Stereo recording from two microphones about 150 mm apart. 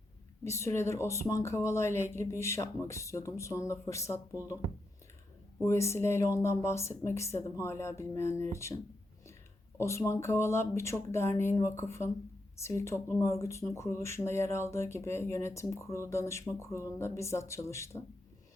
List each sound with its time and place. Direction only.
0.4 s speech: 20° left (ahead or behind)
5.6 s speech: 20° left (ahead or behind)